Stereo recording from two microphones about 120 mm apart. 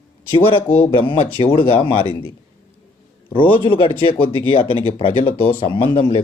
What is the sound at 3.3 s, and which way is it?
Speech, 45° left (ahead or behind).